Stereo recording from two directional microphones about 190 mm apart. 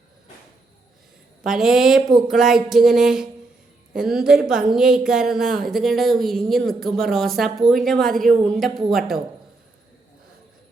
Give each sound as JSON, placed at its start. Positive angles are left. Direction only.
{"t": 1.5, "sound": "speech", "side_deg": 0}